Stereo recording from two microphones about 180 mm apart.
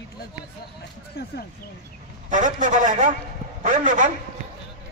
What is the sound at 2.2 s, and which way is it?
A man's voice, 45° right (ahead or behind).